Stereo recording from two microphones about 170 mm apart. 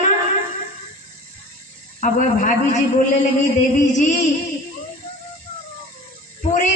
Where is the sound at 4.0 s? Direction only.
45° left (ahead or behind).